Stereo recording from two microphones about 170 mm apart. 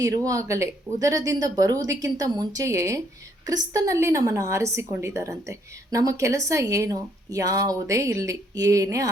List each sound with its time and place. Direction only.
0.0 s a woman's voice: 20° right (ahead or behind)